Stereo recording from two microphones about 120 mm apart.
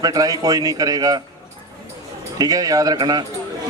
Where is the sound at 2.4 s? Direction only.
30° right (ahead or behind).